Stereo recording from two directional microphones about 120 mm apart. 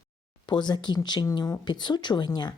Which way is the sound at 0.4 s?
35° left (ahead or behind).